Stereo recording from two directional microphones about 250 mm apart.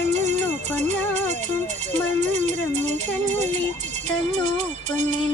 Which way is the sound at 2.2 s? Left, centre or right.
Right.